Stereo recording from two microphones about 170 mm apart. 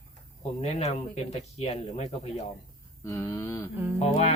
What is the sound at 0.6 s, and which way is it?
Speech, 40° left (ahead or behind).